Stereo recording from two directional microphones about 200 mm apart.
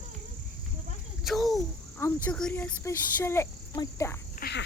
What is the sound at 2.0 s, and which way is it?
Speech, 5° left (ahead or behind).